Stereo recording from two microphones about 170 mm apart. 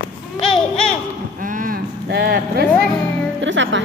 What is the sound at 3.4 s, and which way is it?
Speech, 90° right.